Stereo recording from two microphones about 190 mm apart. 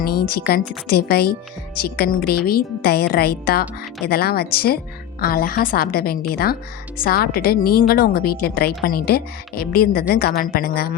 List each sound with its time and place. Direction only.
0.0 s a woman's voice: 55° left (ahead or behind)